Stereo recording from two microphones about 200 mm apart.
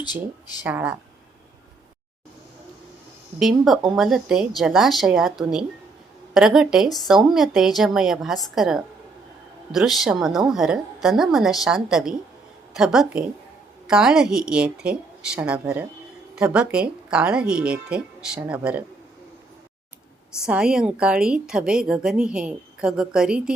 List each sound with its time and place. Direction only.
0.0 s speech: 20° left (ahead or behind)
0.6 s speech: 10° right (ahead or behind)
3.6 s a woman's voice: centre (ahead or behind)
20.4 s a woman's voice: 5° right (ahead or behind)